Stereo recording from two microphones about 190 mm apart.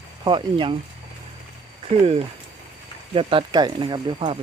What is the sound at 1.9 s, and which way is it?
Speech, 35° right (ahead or behind).